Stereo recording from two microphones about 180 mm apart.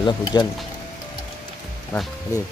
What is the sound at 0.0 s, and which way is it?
Speech, 25° left (ahead or behind).